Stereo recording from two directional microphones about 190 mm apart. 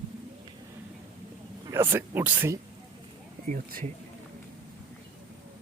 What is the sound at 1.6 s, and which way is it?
Speech, 15° right (ahead or behind).